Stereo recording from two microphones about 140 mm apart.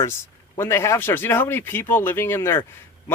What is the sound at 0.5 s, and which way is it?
Speech, 20° left (ahead or behind).